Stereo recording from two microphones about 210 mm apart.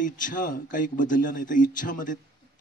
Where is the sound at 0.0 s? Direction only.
40° left (ahead or behind).